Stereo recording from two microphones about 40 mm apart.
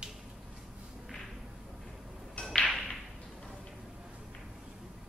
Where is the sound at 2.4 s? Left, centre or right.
Left.